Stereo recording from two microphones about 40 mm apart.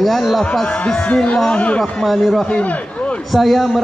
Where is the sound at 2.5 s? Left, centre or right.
Left.